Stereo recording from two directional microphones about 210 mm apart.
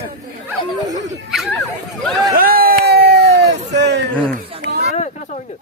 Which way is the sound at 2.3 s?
45° right (ahead or behind).